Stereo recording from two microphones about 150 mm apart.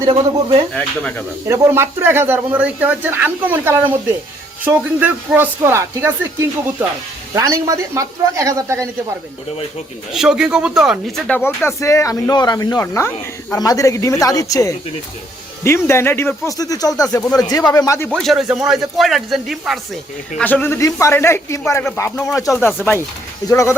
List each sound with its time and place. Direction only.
0.0 s speech: 30° right (ahead or behind)
0.7 s a man's voice: 5° left (ahead or behind)
1.5 s speech: 20° right (ahead or behind)
7.3 s a man's voice: 20° right (ahead or behind)
10.1 s speech: 5° right (ahead or behind)
11.4 s speech: 20° left (ahead or behind)
18.1 s speech: centre (ahead or behind)
20.4 s a man's voice: 10° left (ahead or behind)
22.1 s a man's voice: centre (ahead or behind); by 23.7 s 20° left (ahead or behind)